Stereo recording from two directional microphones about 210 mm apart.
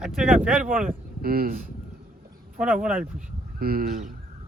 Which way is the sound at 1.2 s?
45° right (ahead or behind).